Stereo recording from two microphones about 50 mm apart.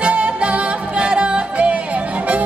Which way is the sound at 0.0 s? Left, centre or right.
Right.